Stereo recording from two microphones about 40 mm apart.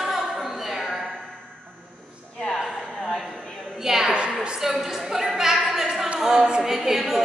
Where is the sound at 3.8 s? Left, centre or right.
Centre.